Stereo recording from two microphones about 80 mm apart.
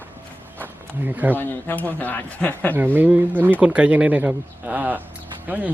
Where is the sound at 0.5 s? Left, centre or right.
Right.